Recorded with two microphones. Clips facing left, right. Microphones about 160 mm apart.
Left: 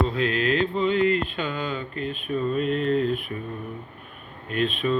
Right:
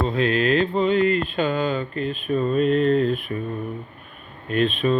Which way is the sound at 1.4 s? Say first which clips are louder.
Right 7 dB; 35° right (ahead or behind).